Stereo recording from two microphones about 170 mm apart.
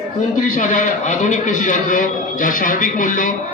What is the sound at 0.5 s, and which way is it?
A man's voice, 50° left (ahead or behind).